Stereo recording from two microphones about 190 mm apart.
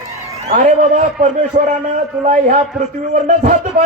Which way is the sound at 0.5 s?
40° right (ahead or behind).